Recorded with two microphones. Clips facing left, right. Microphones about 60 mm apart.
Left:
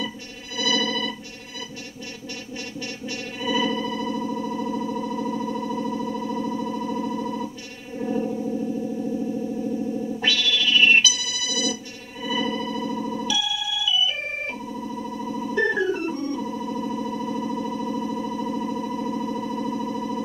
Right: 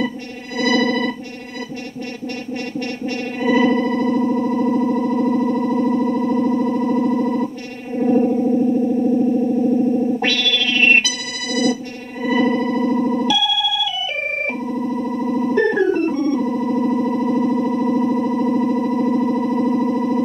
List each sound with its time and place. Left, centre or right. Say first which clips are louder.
0.6 s music: right 8 dB; right
3.1 s music: right 8 dB; right